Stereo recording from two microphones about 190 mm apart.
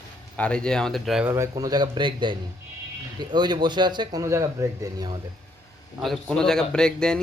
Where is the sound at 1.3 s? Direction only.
15° right (ahead or behind).